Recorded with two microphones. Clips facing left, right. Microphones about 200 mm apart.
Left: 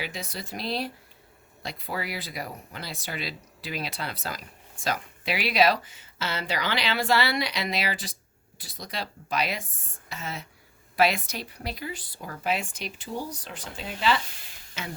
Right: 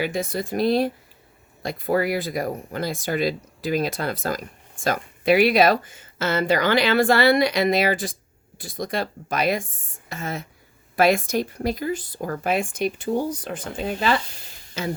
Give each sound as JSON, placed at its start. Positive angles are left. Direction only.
{"t": 0.0, "sound": "speech", "side_deg": -50}
{"t": 14.8, "sound": "speech", "side_deg": -35}